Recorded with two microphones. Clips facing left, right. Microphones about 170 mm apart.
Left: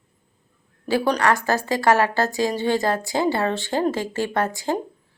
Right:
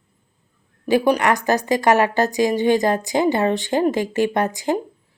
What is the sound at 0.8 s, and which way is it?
A woman's voice, 15° right (ahead or behind).